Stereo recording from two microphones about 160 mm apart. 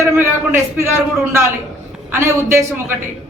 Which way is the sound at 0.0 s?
15° right (ahead or behind).